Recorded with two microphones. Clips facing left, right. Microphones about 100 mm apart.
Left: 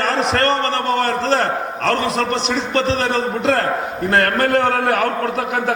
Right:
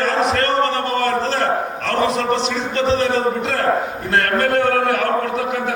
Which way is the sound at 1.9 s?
65° left (ahead or behind).